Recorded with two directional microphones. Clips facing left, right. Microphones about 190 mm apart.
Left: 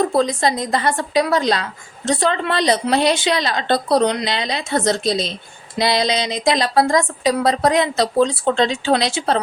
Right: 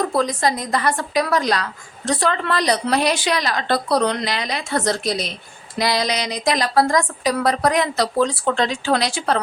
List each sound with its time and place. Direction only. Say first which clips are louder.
0.1 s a woman's voice: left 2 dB; 25° left (ahead or behind)